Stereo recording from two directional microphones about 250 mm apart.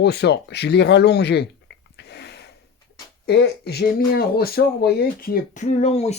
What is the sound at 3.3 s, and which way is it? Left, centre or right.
Speech, left.